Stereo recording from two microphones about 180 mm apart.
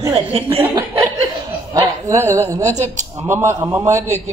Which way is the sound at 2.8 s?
40° right (ahead or behind).